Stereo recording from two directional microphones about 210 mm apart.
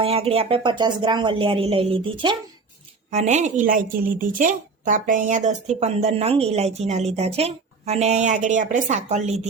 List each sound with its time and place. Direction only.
0.0 s a woman's voice: 25° right (ahead or behind)